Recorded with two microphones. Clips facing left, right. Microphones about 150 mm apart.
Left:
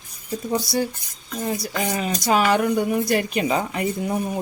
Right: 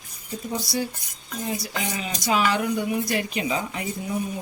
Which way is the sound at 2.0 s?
45° left (ahead or behind).